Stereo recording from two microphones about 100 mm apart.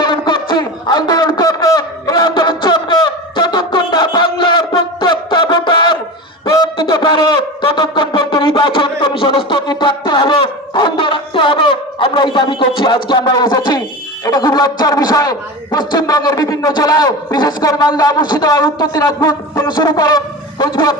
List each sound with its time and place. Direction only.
0.0 s a sound: 50° left (ahead or behind)
6.4 s wind instrument: 45° left (ahead or behind)
14.3 s a man's voice: 40° left (ahead or behind)